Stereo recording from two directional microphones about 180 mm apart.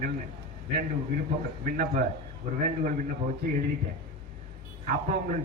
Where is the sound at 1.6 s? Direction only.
45° right (ahead or behind).